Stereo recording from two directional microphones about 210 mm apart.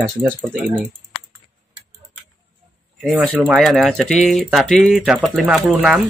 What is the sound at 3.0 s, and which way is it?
Speech, centre (ahead or behind).